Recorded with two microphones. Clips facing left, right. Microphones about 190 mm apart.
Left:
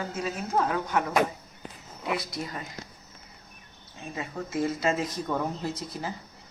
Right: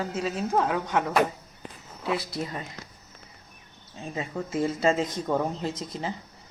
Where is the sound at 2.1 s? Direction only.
25° right (ahead or behind).